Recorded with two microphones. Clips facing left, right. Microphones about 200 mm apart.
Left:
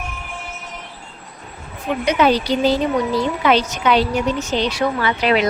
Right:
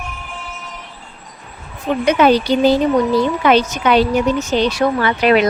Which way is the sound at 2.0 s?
55° right (ahead or behind).